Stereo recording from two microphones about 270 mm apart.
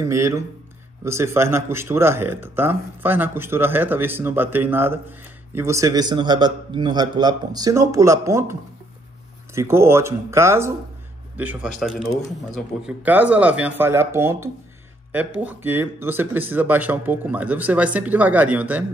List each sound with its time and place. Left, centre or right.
0.0 s speech: centre
9.6 s speech: centre